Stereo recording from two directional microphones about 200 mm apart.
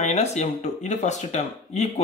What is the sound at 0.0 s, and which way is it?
A man's voice, 35° left (ahead or behind).